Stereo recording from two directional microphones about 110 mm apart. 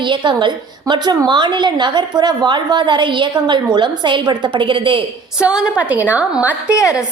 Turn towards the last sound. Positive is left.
turn(degrees=-10)  # may be behind; listen again after turning